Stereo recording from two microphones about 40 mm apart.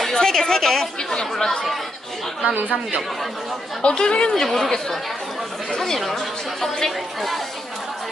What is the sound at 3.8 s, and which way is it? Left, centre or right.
Speech, left.